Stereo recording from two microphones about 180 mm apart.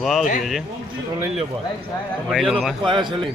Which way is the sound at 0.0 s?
Centre (ahead or behind).